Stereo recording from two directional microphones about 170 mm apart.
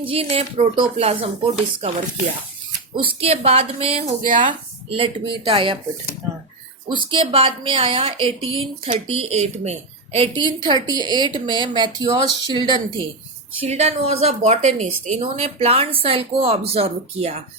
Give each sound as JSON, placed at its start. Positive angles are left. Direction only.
{"t": 0.0, "sound": "a woman's voice", "side_deg": -35}
{"t": 4.3, "sound": "speech", "side_deg": -50}
{"t": 4.9, "sound": "a woman's voice", "side_deg": -30}
{"t": 6.8, "sound": "a woman's voice", "side_deg": -30}
{"t": 10.3, "sound": "a woman's voice", "side_deg": -25}
{"t": 13.6, "sound": "a woman's voice", "side_deg": -40}